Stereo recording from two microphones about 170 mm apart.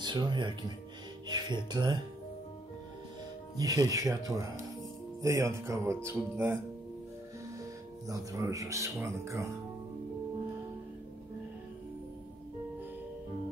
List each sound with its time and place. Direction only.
0.0 s speech: 25° right (ahead or behind)
1.2 s music: 25° right (ahead or behind)
3.5 s speech: 20° right (ahead or behind)
8.1 s speech: 20° right (ahead or behind)